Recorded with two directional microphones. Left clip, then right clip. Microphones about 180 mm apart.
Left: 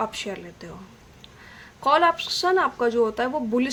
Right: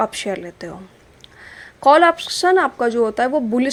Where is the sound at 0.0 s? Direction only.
35° right (ahead or behind).